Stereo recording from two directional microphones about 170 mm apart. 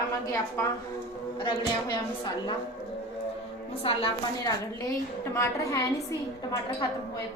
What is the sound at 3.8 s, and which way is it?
Speech, 35° left (ahead or behind).